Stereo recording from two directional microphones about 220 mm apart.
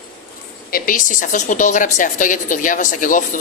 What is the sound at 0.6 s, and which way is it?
A woman's voice, 40° left (ahead or behind).